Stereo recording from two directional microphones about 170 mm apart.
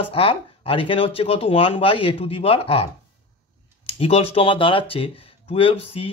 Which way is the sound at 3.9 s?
35° left (ahead or behind).